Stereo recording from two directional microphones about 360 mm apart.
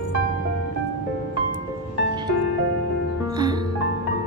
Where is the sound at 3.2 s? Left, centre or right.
Centre.